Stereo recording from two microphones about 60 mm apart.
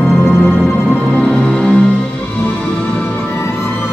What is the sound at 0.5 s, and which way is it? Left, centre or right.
Music, centre.